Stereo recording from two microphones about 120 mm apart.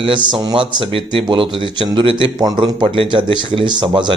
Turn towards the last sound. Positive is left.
turn(degrees=-40)  # may be behind; listen again after turning